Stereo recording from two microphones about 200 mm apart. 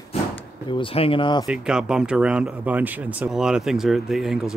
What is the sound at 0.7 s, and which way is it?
Speech, 25° left (ahead or behind).